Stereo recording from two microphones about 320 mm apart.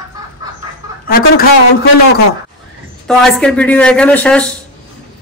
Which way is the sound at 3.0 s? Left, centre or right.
Centre.